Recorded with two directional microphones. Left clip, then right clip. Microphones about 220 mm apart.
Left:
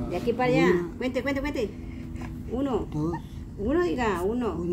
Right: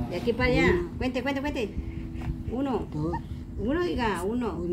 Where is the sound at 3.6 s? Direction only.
15° left (ahead or behind).